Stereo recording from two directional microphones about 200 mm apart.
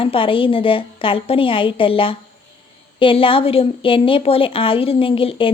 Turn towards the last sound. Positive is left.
turn(degrees=25)  # may be behind; listen again after turning